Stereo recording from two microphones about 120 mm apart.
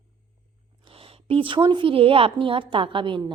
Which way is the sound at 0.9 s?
50° right (ahead or behind).